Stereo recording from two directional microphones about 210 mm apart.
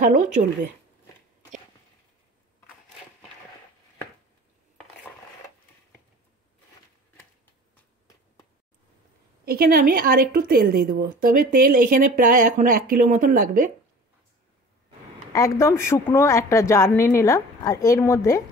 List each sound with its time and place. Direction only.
0.0 s speech: 35° right (ahead or behind)
9.4 s speech: 45° right (ahead or behind)
15.3 s speech: 15° left (ahead or behind)